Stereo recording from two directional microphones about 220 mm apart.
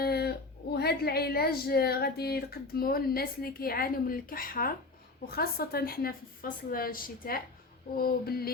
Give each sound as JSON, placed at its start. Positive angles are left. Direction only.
{"t": 0.0, "sound": "speech", "side_deg": 45}